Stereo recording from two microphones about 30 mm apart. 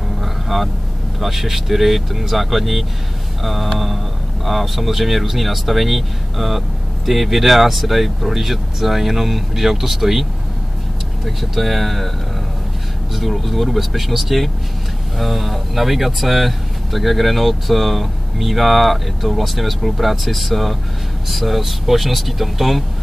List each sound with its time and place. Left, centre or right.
0.2 s vehicle: centre
1.2 s speech: centre
11.2 s speech: centre
13.1 s speech: centre